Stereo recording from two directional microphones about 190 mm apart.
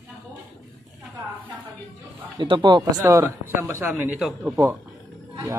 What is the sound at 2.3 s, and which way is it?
Speech, 25° right (ahead or behind).